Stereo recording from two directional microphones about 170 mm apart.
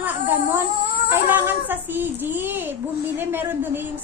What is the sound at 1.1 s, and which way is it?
A child's voice, 10° right (ahead or behind).